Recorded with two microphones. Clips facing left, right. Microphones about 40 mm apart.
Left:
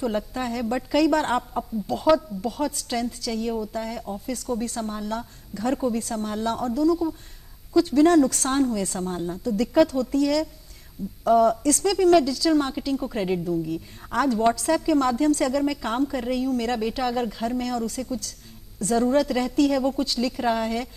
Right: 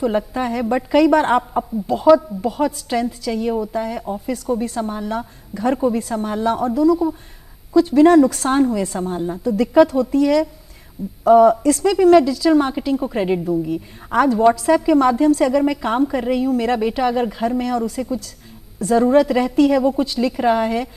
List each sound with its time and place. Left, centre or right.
0.0 s a woman's voice: centre